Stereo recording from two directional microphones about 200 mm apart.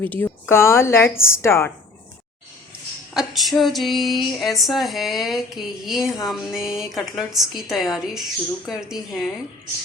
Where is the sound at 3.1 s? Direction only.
Centre (ahead or behind).